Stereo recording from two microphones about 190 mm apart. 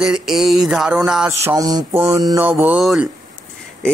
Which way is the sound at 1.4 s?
15° right (ahead or behind).